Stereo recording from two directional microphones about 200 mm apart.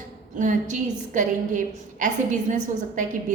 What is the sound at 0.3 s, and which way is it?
A woman's voice, 40° right (ahead or behind).